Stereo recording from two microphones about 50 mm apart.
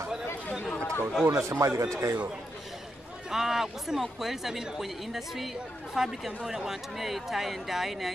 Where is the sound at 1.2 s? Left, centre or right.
Right.